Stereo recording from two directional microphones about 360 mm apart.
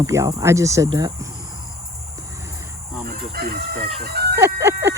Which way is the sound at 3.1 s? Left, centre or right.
Right.